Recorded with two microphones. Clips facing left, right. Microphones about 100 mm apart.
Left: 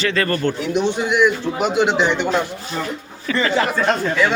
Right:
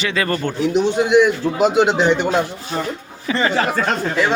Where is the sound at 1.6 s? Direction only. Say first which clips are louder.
Right 3 dB; 40° right (ahead or behind).